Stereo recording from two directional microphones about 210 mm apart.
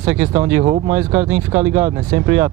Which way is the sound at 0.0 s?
10° right (ahead or behind).